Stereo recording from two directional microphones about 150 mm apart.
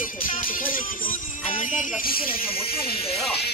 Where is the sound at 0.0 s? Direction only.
65° left (ahead or behind).